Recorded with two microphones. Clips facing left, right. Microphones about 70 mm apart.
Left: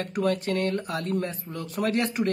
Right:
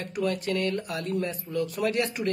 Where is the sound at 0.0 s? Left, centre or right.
Left.